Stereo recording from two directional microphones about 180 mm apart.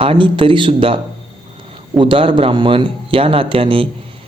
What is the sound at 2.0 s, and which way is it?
Speech, 30° right (ahead or behind).